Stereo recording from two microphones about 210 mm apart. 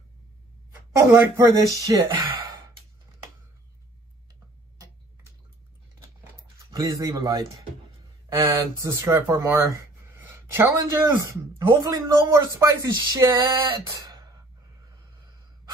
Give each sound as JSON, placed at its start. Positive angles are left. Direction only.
{"t": 1.1, "sound": "a man's voice", "side_deg": -15}
{"t": 6.7, "sound": "a man's voice", "side_deg": -15}
{"t": 8.5, "sound": "a man's voice", "side_deg": -15}